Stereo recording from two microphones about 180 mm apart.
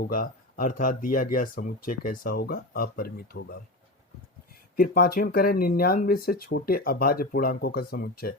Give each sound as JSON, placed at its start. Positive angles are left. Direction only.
{"t": 0.0, "sound": "speech", "side_deg": 50}
{"t": 4.8, "sound": "speech", "side_deg": 55}